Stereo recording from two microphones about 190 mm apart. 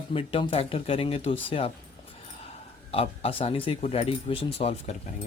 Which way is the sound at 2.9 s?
30° left (ahead or behind).